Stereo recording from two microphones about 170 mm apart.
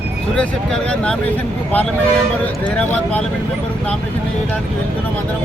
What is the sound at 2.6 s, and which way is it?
Speech, 10° left (ahead or behind).